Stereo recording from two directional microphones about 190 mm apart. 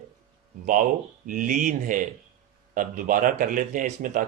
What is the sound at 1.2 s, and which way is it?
Speech, 45° right (ahead or behind).